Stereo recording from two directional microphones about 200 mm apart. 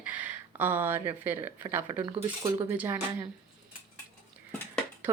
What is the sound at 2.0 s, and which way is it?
Speech, 20° right (ahead or behind).